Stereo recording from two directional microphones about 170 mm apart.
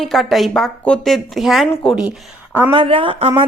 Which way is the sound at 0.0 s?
Centre (ahead or behind).